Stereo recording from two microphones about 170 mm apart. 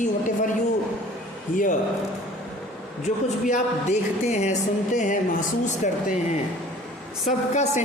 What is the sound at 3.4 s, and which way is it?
A woman's voice, 45° left (ahead or behind).